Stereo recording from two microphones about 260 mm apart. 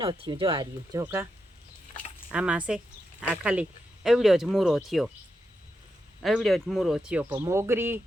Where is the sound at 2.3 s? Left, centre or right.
Centre.